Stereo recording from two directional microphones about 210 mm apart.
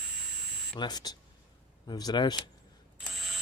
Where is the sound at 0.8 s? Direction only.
20° left (ahead or behind).